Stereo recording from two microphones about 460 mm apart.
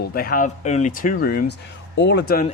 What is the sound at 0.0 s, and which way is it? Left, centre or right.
Speech, centre.